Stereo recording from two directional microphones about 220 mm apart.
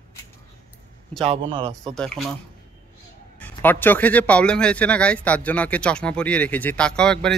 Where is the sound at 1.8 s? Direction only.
5° left (ahead or behind).